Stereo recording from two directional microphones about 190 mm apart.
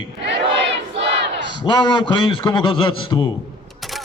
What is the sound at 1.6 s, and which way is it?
A man's voice, 25° left (ahead or behind).